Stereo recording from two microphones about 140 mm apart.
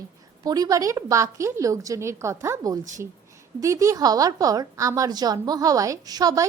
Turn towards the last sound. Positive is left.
turn(degrees=-25)  # may be behind; listen again after turning